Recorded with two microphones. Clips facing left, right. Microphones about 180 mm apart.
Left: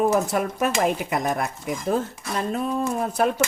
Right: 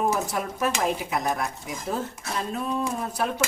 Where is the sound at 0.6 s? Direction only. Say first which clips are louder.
Left 2 dB; 60° left (ahead or behind).